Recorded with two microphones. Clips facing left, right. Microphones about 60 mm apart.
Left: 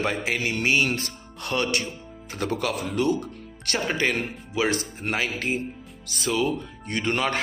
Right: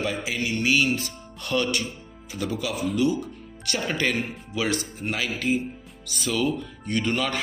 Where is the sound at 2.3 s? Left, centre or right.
Left.